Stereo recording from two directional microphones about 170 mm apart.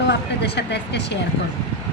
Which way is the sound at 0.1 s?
85° left.